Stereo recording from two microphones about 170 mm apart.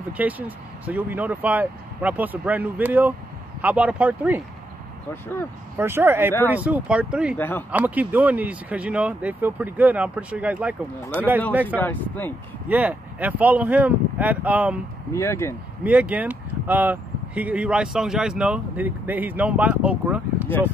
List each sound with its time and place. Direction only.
0.2 s speech: 10° right (ahead or behind)
5.8 s speech: 15° right (ahead or behind)
7.3 s speech: 10° left (ahead or behind)
7.7 s speech: 10° right (ahead or behind)
11.6 s speech: 10° left (ahead or behind)
12.6 s speech: 10° right (ahead or behind)
15.1 s speech: 15° left (ahead or behind)
15.8 s speech: 10° right (ahead or behind)